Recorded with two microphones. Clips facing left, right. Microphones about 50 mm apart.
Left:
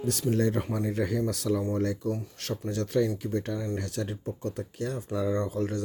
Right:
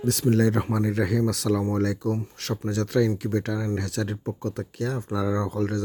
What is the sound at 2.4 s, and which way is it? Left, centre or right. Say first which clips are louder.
Speech: right 4 dB; right.